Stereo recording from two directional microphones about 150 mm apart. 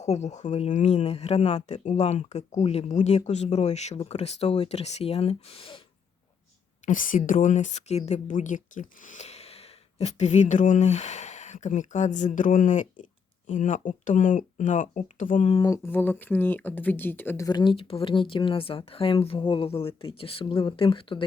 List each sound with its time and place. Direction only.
0.0 s a woman's voice: 50° left (ahead or behind)
6.8 s a woman's voice: 65° left (ahead or behind)
15.6 s speech: 20° left (ahead or behind); by 21.2 s 35° left (ahead or behind)